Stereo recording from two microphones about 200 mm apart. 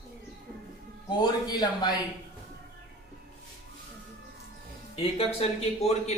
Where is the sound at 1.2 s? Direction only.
20° left (ahead or behind).